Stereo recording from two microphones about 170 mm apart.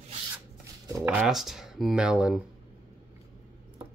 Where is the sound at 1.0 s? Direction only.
5° right (ahead or behind).